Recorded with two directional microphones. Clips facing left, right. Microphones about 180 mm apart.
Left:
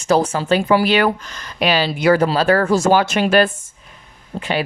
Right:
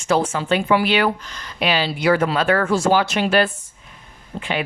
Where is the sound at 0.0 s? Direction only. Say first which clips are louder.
Left 3 dB; 40° left (ahead or behind).